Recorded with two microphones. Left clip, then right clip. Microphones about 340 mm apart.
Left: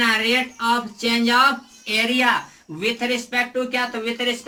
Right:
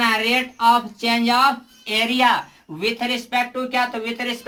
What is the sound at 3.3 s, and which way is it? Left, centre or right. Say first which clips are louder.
Speech: even; centre.